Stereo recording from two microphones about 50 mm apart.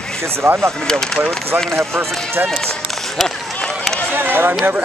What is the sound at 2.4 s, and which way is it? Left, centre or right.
Speech, right.